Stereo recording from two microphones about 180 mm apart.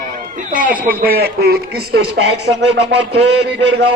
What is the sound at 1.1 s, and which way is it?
Speech, 60° right (ahead or behind).